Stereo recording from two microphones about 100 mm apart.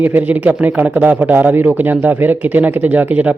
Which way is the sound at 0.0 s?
15° right (ahead or behind).